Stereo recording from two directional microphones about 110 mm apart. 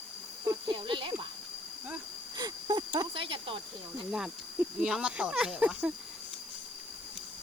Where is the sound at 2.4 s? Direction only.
40° right (ahead or behind).